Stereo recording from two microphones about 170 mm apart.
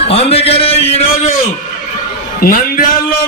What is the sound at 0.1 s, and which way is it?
A man's voice, 35° left (ahead or behind).